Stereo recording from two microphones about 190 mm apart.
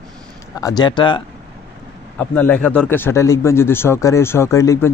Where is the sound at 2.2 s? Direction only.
10° left (ahead or behind).